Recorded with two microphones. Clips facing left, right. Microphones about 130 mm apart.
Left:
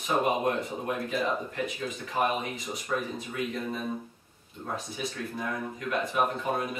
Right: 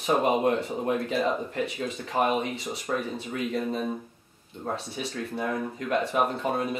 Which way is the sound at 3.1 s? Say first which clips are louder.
Right 3 dB; 30° right (ahead or behind).